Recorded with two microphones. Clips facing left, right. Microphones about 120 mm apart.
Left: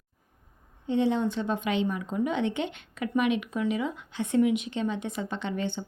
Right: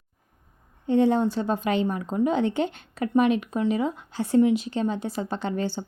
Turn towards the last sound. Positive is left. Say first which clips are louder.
# right 4 dB
turn(degrees=-35)  # may be behind; listen again after turning